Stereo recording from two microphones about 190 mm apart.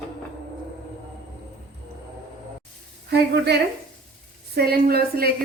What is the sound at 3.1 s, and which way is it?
A woman's voice, 60° right (ahead or behind).